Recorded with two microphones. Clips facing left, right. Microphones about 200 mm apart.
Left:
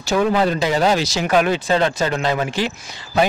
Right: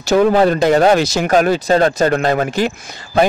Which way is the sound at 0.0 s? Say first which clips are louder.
Right 6 dB; 45° right (ahead or behind).